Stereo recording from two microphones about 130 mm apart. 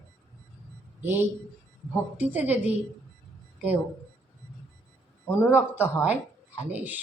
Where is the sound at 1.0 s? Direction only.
15° right (ahead or behind).